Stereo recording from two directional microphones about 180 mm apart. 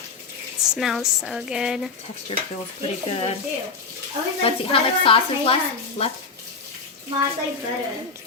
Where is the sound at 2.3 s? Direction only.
35° left (ahead or behind).